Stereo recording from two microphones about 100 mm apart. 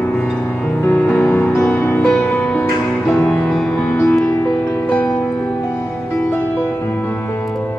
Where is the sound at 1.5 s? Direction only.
25° left (ahead or behind).